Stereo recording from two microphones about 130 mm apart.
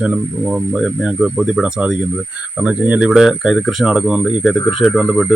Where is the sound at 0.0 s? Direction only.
10° right (ahead or behind).